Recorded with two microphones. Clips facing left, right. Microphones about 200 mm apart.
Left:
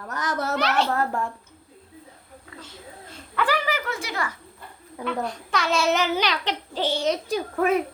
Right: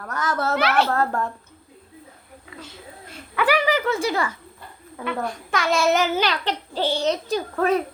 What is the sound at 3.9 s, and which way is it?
Speech, 30° right (ahead or behind).